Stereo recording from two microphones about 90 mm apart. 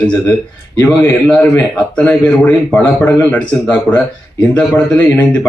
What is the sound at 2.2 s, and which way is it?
Speech, 20° left (ahead or behind).